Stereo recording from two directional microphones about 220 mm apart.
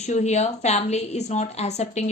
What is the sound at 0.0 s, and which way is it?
A woman's voice, 30° left (ahead or behind).